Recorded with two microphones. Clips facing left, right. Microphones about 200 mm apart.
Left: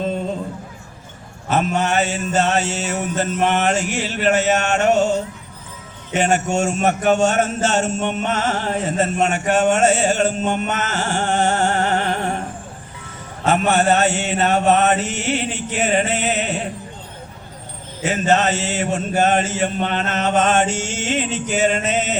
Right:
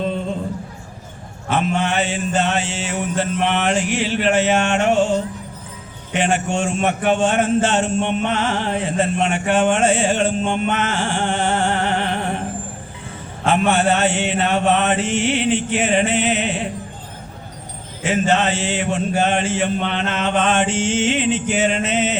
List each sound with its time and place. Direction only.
1.5 s a man's voice: 40° left (ahead or behind)
6.1 s a man's voice: 40° left (ahead or behind)
13.4 s a man's voice: 40° left (ahead or behind)
18.0 s a man's voice: 40° left (ahead or behind)